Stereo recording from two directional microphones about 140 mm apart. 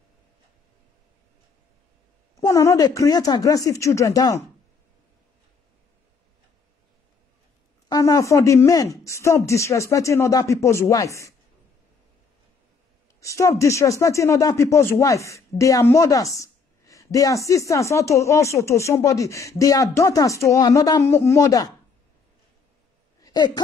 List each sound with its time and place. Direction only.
2.4 s speech: 25° left (ahead or behind)
7.9 s speech: 25° left (ahead or behind)
13.2 s speech: 20° left (ahead or behind)
23.2 s speech: 30° left (ahead or behind)